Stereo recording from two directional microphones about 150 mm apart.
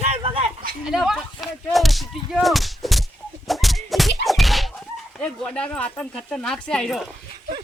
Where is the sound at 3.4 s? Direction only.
Centre (ahead or behind).